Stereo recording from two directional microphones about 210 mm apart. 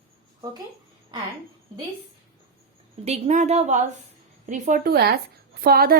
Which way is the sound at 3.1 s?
30° right (ahead or behind).